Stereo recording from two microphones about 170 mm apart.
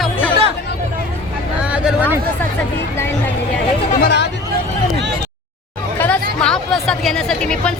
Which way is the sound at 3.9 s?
70° left (ahead or behind).